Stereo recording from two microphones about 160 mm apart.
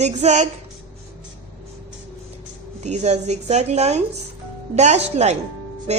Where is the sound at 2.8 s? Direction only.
45° right (ahead or behind).